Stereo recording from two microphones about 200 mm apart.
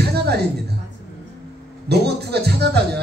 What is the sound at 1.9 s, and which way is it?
A man's voice, 55° right (ahead or behind).